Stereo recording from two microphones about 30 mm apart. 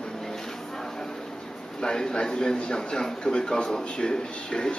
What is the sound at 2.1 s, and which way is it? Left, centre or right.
A man's voice, left.